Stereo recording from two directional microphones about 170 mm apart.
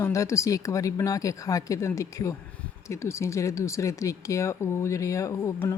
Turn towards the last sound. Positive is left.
turn(degrees=15)  # may be behind; listen again after turning